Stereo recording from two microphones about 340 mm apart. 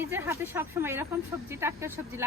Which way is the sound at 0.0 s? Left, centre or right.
Centre.